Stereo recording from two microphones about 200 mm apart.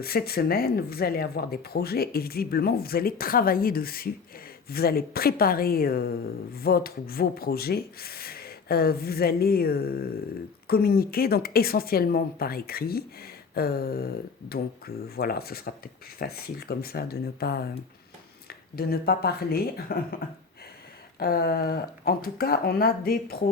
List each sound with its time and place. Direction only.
0.0 s speech: 50° left (ahead or behind)
21.2 s speech: 50° left (ahead or behind)